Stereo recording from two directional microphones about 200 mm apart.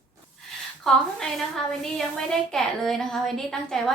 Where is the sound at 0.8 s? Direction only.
Centre (ahead or behind).